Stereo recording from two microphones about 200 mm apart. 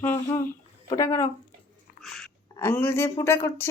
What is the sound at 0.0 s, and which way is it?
Speech, 10° left (ahead or behind).